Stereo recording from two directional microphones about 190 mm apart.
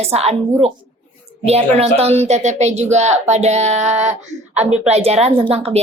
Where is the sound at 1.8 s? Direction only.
35° right (ahead or behind).